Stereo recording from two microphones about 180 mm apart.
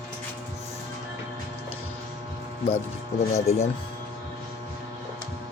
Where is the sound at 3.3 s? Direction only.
35° left (ahead or behind).